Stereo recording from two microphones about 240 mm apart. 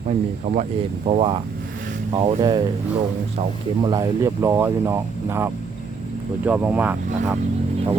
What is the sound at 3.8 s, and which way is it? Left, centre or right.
Speech, centre.